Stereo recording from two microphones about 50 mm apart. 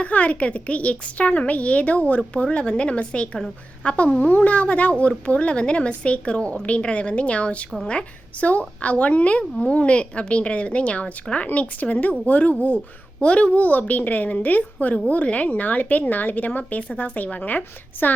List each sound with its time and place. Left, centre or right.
0.0 s a woman's voice: left